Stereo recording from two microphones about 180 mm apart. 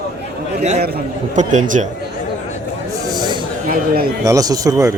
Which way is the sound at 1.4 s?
40° right (ahead or behind).